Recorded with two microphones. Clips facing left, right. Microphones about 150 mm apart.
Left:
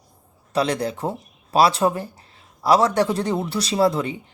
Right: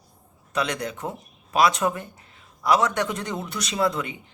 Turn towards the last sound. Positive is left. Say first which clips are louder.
# left 5 dB
turn(degrees=30)  # may be behind; listen again after turning